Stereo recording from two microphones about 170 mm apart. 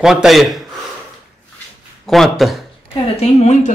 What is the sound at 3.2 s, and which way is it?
Speech, 40° left (ahead or behind).